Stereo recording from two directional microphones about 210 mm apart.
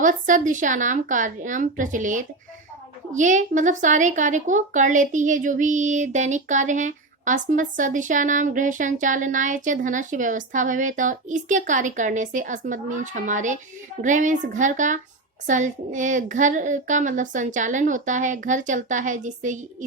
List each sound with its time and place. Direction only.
0.0 s speech: 35° right (ahead or behind)